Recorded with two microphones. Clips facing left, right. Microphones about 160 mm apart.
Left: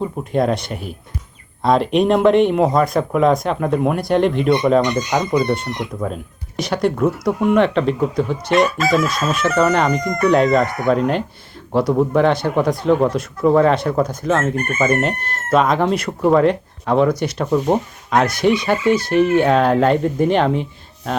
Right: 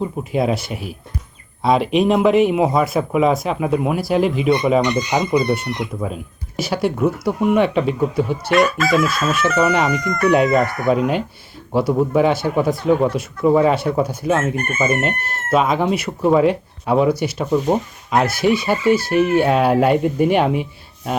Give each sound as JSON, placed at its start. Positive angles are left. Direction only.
{"t": 0.0, "sound": "speech", "side_deg": -5}
{"t": 10.0, "sound": "speech", "side_deg": 25}
{"t": 10.2, "sound": "speech", "side_deg": -5}